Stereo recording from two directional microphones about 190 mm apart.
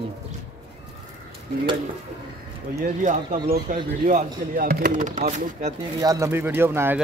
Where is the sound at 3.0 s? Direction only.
40° right (ahead or behind).